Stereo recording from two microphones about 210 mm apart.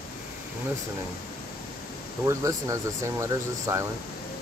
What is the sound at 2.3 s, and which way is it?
Speech, 15° right (ahead or behind).